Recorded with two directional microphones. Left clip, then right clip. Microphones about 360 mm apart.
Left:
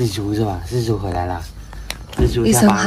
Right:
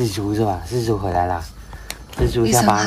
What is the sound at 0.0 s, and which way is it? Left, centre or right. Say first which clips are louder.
Speech: even; centre.